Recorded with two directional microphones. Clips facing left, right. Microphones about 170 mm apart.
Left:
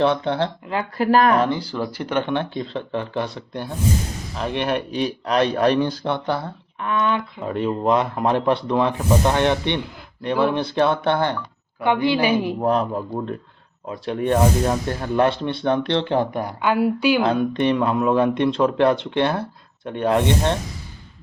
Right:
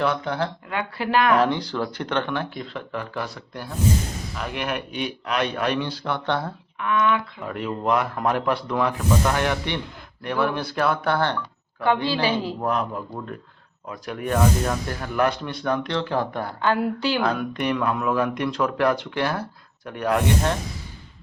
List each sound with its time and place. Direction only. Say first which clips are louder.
0.0 s speech: left 4 dB; 30° left (ahead or behind)
0.9 s speech: left 4 dB; 40° left (ahead or behind)
1.4 s speech: even; centre (ahead or behind)
2.2 s speech: left 4 dB; 25° left (ahead or behind); by 6.1 s 40° left (ahead or behind)
6.2 s speech: left 1 dB; 5° left (ahead or behind)
6.7 s a woman's voice: even; 35° left (ahead or behind); by 12.6 s 15° left (ahead or behind)
12.6 s speech: left 5 dB; 30° left (ahead or behind); by 17.2 s 10° left (ahead or behind)
17.2 s speech: left 5 dB; 25° left (ahead or behind)